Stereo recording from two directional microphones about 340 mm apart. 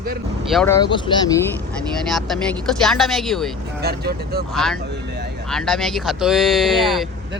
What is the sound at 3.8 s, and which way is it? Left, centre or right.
Speech, right.